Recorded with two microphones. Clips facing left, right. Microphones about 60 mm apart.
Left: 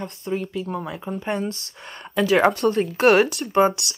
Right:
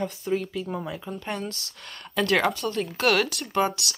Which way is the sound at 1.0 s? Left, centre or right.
Centre.